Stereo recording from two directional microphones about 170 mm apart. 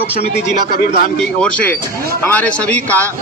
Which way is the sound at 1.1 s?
5° left (ahead or behind).